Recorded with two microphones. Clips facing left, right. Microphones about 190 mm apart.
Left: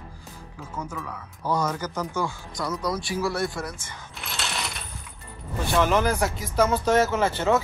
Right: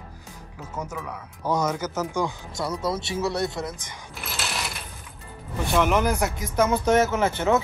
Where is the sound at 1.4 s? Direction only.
10° right (ahead or behind).